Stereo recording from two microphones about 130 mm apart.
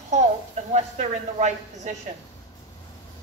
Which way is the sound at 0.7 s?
65° right (ahead or behind).